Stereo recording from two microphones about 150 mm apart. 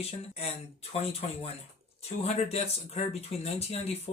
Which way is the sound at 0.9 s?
40° left (ahead or behind).